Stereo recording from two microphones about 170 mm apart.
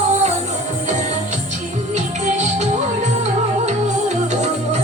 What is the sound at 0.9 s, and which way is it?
Music, 45° right (ahead or behind).